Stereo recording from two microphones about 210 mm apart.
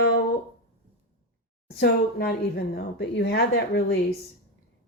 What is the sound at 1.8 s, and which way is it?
Speech, 50° left (ahead or behind).